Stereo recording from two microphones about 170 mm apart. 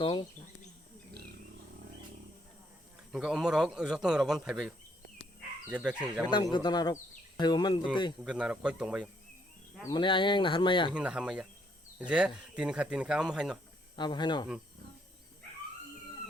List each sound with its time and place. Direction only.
0.0 s speech: 30° left (ahead or behind)
3.1 s speech: centre (ahead or behind)
6.2 s speech: 25° left (ahead or behind)
8.2 s speech: 5° right (ahead or behind)
9.8 s speech: 25° left (ahead or behind)
10.9 s speech: 5° right (ahead or behind)
13.9 s speech: 25° left (ahead or behind)